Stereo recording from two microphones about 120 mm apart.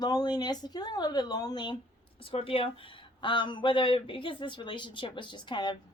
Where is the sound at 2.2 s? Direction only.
50° left (ahead or behind).